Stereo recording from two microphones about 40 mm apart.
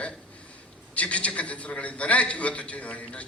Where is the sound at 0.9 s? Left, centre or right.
Left.